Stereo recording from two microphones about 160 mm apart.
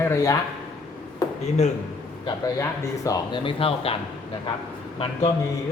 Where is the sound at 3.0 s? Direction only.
30° left (ahead or behind).